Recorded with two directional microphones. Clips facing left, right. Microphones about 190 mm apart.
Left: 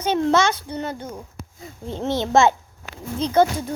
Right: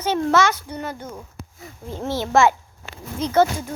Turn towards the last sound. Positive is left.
turn(degrees=15)  # may be behind; listen again after turning